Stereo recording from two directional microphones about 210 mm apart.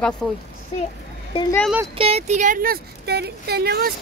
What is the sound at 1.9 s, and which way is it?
Speech, 30° right (ahead or behind).